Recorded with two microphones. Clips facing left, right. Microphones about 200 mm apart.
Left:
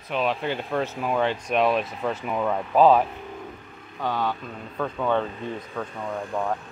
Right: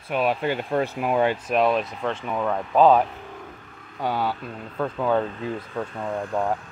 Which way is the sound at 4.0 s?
10° right (ahead or behind).